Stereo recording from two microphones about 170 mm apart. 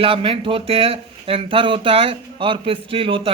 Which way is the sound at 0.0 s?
35° right (ahead or behind).